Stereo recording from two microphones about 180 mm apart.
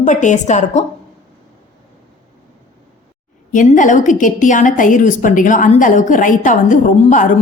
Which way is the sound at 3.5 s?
45° left (ahead or behind).